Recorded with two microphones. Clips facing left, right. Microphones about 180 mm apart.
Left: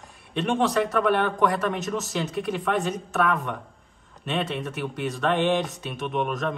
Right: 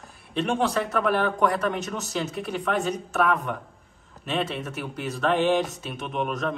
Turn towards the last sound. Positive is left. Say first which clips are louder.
# left 1 dB
turn(degrees=0)  # may be behind; listen again after turning